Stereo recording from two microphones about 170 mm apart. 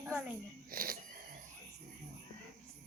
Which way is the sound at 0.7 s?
60° right (ahead or behind).